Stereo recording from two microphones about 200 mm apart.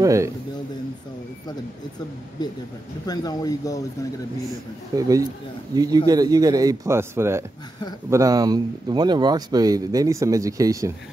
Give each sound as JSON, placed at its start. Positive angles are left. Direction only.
{"t": 0.0, "sound": "speech", "side_deg": -15}
{"t": 3.1, "sound": "speech", "side_deg": 20}
{"t": 4.9, "sound": "speech", "side_deg": -15}